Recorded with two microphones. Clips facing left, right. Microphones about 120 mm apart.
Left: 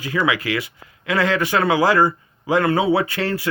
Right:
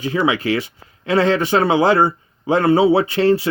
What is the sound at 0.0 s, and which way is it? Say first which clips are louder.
Speech: right 3 dB; 25° right (ahead or behind).